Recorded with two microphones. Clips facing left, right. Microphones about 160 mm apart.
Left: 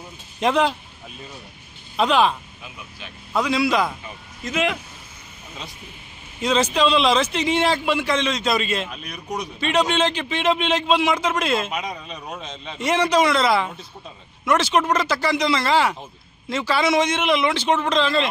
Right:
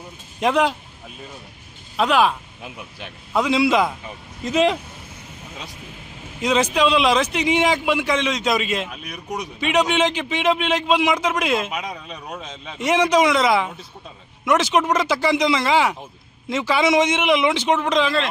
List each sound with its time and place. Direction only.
0.3 s speech: 10° right (ahead or behind)
2.0 s a man's voice: 5° right (ahead or behind)
3.3 s a man's voice: 20° right (ahead or behind)
4.4 s speech: 35° right (ahead or behind)
6.4 s a man's voice: 15° right (ahead or behind)
12.8 s a man's voice: 15° right (ahead or behind)